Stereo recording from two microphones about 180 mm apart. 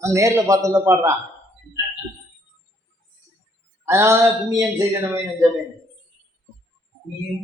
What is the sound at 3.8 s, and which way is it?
Speech, 15° right (ahead or behind).